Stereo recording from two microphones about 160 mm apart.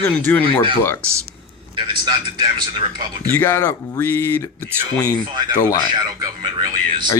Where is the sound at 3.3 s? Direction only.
15° left (ahead or behind).